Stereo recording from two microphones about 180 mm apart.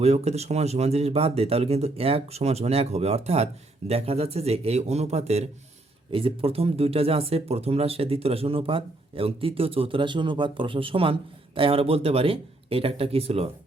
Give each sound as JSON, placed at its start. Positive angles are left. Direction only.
{"t": 0.0, "sound": "speech", "side_deg": -35}